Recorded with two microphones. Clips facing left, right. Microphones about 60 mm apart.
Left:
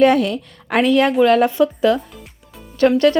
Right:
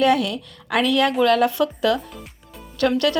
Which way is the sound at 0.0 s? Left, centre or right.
Left.